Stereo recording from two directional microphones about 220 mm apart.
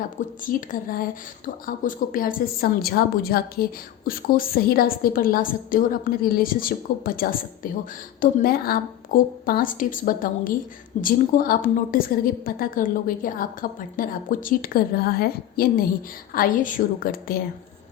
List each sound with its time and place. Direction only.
0.4 s a woman's voice: 40° left (ahead or behind)